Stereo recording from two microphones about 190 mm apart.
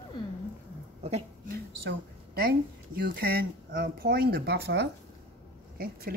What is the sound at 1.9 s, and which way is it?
A woman's voice, 55° right (ahead or behind).